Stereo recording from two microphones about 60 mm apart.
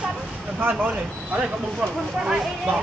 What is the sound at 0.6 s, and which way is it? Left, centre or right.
Speech, right.